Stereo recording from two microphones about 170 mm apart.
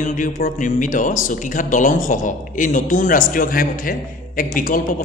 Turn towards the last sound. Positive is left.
turn(degrees=55)  # may be behind; listen again after turning